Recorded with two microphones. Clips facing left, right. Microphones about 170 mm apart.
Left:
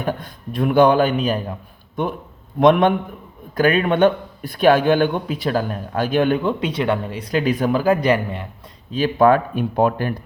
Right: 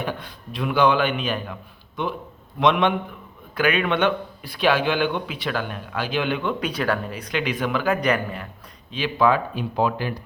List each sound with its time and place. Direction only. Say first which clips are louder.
0.0 s a man's voice: left 4 dB; 45° left (ahead or behind)
2.6 s a man's voice: left 6 dB; 50° left (ahead or behind)
6.6 s speech: left 4 dB; 25° left (ahead or behind)
7.3 s speech: left 6 dB; 40° left (ahead or behind)
8.9 s a man's voice: left 5 dB; 45° left (ahead or behind)